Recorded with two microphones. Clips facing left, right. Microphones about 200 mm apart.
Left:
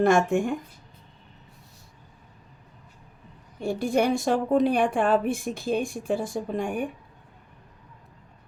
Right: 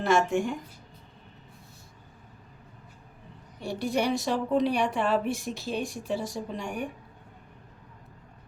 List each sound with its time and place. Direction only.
0.0 s a woman's voice: 50° left (ahead or behind)
3.6 s a woman's voice: 50° left (ahead or behind)